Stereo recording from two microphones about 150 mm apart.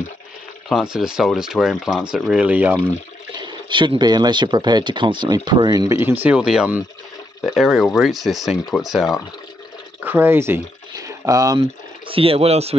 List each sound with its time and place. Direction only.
0.7 s speech: centre (ahead or behind)
3.3 s speech: 30° right (ahead or behind)
5.9 s speech: 15° right (ahead or behind)
10.0 s speech: 15° right (ahead or behind)
12.1 s speech: 40° right (ahead or behind)